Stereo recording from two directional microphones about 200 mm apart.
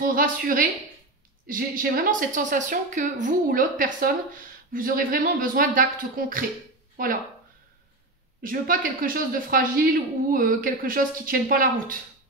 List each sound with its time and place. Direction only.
0.0 s speech: 45° right (ahead or behind)
8.4 s speech: 45° right (ahead or behind)